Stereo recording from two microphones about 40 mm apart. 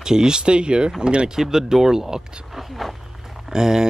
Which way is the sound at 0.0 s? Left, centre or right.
Centre.